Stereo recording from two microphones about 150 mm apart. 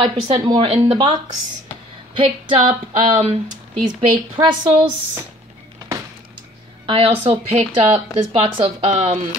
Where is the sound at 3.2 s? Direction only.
50° right (ahead or behind).